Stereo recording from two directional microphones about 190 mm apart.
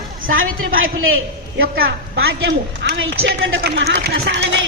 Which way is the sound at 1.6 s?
55° right (ahead or behind).